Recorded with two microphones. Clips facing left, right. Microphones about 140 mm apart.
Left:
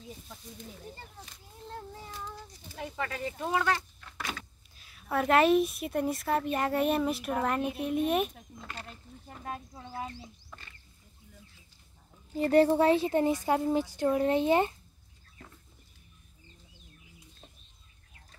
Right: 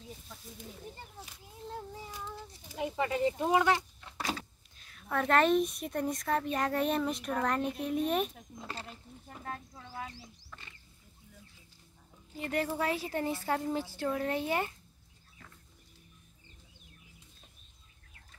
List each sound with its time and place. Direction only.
0.6 s child singing: 10° right (ahead or behind)
2.6 s a sound: 15° right (ahead or behind)
4.2 s power windows: 30° right (ahead or behind)
4.7 s a sound: 5° left (ahead or behind)
5.3 s a child's voice: 5° left (ahead or behind)
9.7 s a woman's voice: 20° left (ahead or behind)
12.4 s a woman's voice: 35° left (ahead or behind)